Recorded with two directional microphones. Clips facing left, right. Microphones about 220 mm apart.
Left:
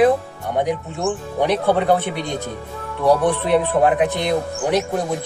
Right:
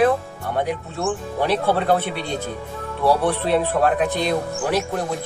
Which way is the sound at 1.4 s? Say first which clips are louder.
Left 3 dB; 15° left (ahead or behind).